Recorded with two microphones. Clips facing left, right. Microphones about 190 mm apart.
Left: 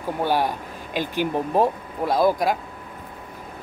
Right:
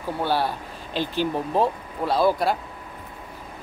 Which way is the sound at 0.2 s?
15° left (ahead or behind).